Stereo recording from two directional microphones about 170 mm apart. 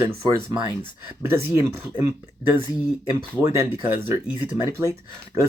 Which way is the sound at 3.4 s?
15° right (ahead or behind).